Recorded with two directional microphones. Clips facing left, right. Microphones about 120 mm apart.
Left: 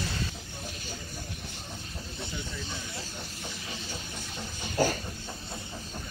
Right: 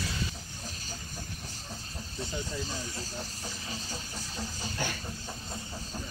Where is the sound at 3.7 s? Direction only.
35° right (ahead or behind).